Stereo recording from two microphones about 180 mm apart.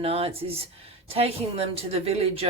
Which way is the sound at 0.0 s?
35° right (ahead or behind).